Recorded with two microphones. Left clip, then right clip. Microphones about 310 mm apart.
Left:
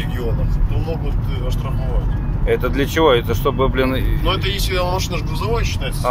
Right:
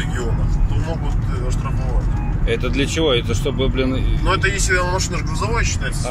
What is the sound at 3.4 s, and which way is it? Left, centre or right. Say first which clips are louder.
Speech: left 4 dB; left.